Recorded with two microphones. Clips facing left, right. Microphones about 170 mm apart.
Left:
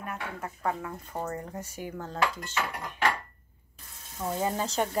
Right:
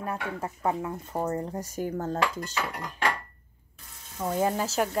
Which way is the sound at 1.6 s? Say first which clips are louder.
Right 6 dB; 40° right (ahead or behind).